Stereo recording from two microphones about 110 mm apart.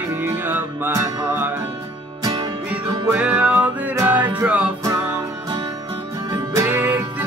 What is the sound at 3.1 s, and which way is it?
Music, 15° right (ahead or behind).